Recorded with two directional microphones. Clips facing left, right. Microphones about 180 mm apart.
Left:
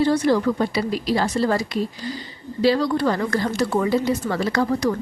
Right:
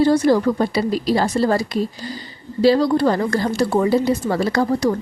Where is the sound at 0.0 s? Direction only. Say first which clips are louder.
Right 3 dB; 35° right (ahead or behind).